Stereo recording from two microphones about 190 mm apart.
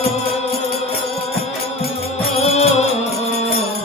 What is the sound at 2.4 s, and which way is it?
Music, 35° left (ahead or behind).